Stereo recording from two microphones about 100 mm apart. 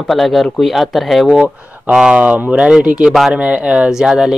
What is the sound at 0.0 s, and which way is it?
Speech, centre (ahead or behind).